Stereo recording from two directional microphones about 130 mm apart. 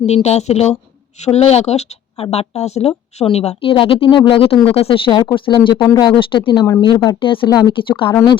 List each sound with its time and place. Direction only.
0.0 s speech: 60° left (ahead or behind)
3.6 s speech: 45° left (ahead or behind)